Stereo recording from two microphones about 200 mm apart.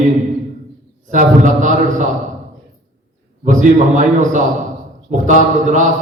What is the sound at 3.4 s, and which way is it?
Speech, 40° right (ahead or behind).